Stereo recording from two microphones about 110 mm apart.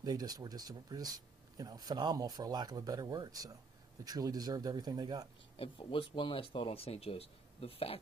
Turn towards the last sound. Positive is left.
turn(degrees=60)  # may be behind; listen again after turning